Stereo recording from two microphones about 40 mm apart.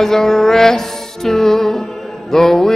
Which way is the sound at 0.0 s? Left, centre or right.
Centre.